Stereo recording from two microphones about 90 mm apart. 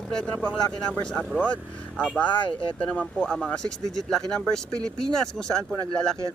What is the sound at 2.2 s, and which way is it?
Speech, 65° left (ahead or behind).